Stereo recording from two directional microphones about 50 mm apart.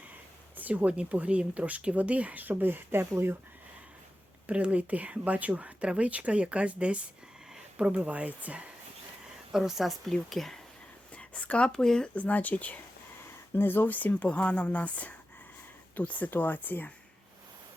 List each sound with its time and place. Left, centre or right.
0.5 s speech: right
4.4 s speech: right
9.5 s speech: centre
11.1 s a sound: left
11.7 s speech: centre
12.1 s speech: left
13.6 s speech: left
14.1 s speech: left